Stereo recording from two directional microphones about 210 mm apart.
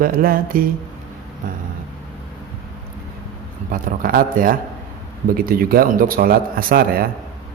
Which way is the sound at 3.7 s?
45° right (ahead or behind).